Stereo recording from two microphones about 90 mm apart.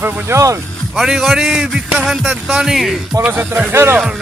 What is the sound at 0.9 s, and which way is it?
A man's voice, 5° right (ahead or behind).